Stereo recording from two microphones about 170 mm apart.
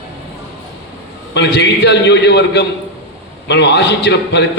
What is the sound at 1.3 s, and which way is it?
A man's voice, 80° left.